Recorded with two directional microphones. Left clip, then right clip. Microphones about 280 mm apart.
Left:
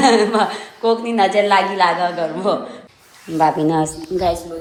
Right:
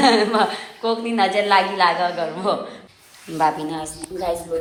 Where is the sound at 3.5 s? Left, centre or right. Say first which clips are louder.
Left 10 dB; left.